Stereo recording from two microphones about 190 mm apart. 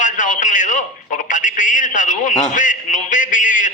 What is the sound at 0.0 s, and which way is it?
A man's voice, 40° left (ahead or behind).